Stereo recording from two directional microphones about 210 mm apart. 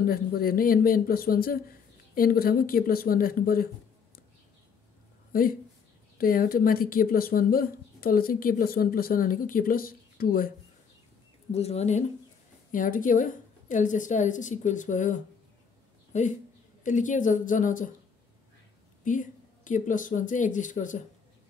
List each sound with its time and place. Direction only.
0.0 s a woman's voice: 45° left (ahead or behind)
5.3 s a woman's voice: 45° left (ahead or behind)
11.5 s a woman's voice: 30° left (ahead or behind)
19.0 s a woman's voice: 35° left (ahead or behind)